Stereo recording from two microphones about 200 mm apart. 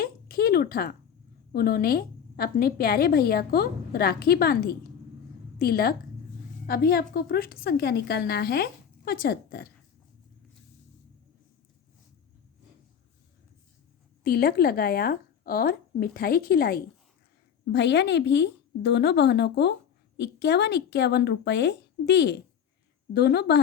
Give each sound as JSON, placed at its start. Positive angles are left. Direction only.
{"t": 0.0, "sound": "a sound", "side_deg": 50}
{"t": 1.5, "sound": "a woman's voice", "side_deg": 50}
{"t": 14.3, "sound": "a woman's voice", "side_deg": 50}